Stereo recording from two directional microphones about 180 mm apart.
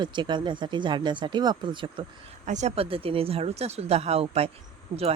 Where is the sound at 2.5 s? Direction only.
40° right (ahead or behind).